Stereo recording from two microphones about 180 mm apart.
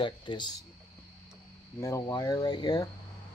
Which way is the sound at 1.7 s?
15° left (ahead or behind).